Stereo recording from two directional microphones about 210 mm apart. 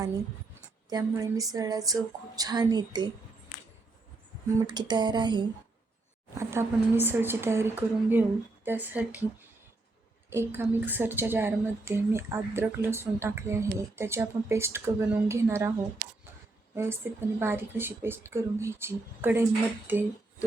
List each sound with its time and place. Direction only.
0.9 s a woman's voice: 15° right (ahead or behind)
4.6 s music: 20° right (ahead or behind)
6.3 s a woman's voice: 15° right (ahead or behind)
10.2 s a woman's voice: 10° right (ahead or behind)
16.7 s a woman's voice: 10° right (ahead or behind)